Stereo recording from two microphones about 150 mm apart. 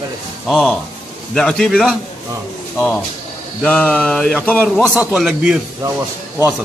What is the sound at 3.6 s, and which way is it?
Speech, 10° left (ahead or behind).